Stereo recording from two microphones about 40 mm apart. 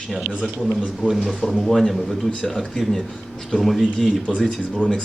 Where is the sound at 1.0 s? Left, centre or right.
Right.